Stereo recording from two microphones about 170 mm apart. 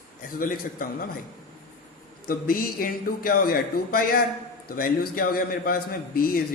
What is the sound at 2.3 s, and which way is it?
A man's voice, 60° left (ahead or behind).